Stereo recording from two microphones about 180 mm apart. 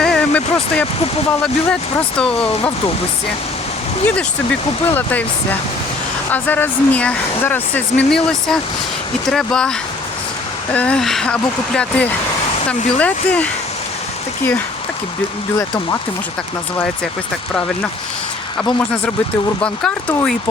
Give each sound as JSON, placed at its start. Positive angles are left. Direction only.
{"t": 0.0, "sound": "vehicle", "side_deg": 5}
{"t": 1.7, "sound": "speech", "side_deg": 5}
{"t": 4.0, "sound": "speech", "side_deg": 5}
{"t": 15.5, "sound": "speech", "side_deg": 15}
{"t": 19.6, "sound": "speech", "side_deg": 5}